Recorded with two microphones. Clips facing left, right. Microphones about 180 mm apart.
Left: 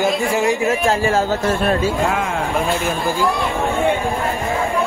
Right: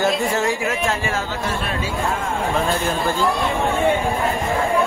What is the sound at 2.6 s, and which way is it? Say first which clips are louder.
Speech: left 2 dB; 10° left (ahead or behind).